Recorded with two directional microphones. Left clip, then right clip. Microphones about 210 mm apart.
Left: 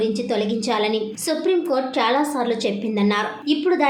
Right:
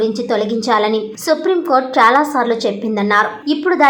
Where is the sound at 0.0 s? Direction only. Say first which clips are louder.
Right 5 dB; 15° right (ahead or behind).